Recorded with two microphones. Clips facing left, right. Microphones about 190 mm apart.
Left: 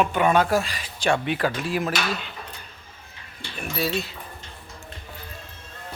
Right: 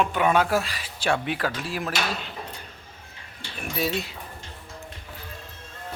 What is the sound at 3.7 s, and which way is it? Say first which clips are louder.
Speech: even; 15° right (ahead or behind).